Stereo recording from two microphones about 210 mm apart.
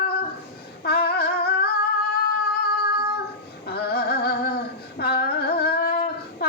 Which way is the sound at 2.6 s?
45° left (ahead or behind).